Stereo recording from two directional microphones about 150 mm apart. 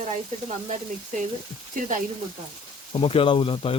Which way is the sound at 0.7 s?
55° right (ahead or behind).